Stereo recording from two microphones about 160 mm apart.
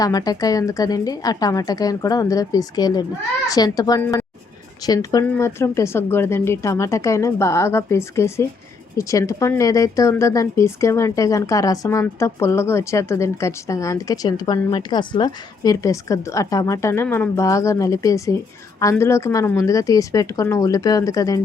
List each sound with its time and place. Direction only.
0.0 s speech: 25° left (ahead or behind)
4.0 s a woman's voice: 10° left (ahead or behind)
4.8 s speech: 25° left (ahead or behind)
5.2 s speech: 15° left (ahead or behind)